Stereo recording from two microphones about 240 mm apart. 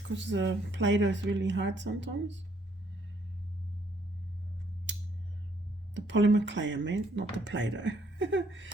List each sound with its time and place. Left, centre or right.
0.1 s speech: right
5.9 s speech: right